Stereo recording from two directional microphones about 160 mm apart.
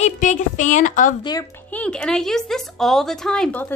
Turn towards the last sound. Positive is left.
turn(degrees=10)  # may be behind; listen again after turning